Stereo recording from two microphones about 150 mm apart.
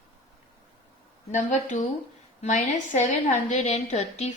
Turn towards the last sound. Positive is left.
turn(degrees=50)  # may be behind; listen again after turning